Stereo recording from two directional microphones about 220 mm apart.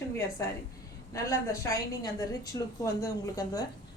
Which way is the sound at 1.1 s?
15° left (ahead or behind).